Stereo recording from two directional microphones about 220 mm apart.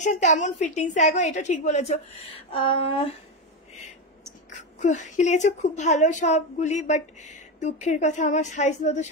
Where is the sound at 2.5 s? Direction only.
25° left (ahead or behind).